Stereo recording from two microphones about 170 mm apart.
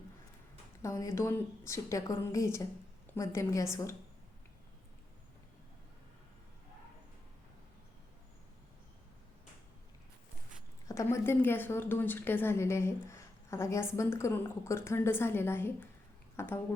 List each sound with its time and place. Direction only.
0.8 s speech: 20° left (ahead or behind)
10.8 s speech: 15° left (ahead or behind)